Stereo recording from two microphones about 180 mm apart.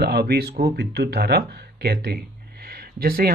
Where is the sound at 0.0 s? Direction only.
65° right (ahead or behind).